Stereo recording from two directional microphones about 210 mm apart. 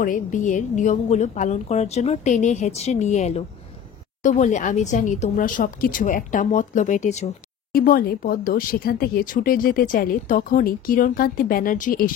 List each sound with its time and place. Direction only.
0.0 s a woman's voice: 40° left (ahead or behind)
7.7 s speech: 45° left (ahead or behind)